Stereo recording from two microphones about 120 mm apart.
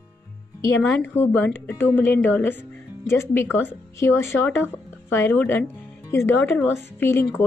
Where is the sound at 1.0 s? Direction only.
15° left (ahead or behind).